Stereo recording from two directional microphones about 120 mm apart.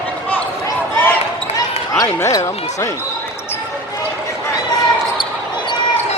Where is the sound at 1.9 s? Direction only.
30° left (ahead or behind).